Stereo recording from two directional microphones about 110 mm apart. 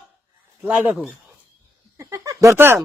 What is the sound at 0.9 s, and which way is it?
Speech, centre (ahead or behind).